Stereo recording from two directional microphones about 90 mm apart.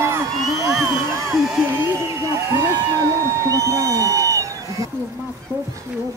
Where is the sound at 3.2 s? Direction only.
35° right (ahead or behind).